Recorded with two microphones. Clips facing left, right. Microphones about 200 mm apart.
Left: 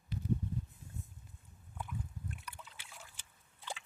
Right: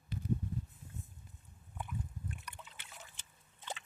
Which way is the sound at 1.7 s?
5° right (ahead or behind).